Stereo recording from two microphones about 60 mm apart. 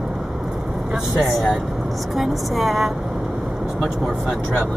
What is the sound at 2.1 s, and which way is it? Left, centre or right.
Speech, centre.